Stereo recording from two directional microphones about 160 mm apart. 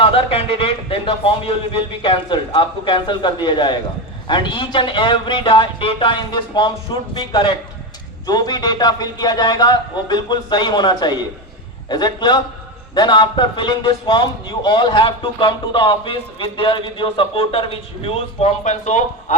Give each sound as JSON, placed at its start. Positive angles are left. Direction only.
{"t": 0.0, "sound": "a man's voice", "side_deg": 35}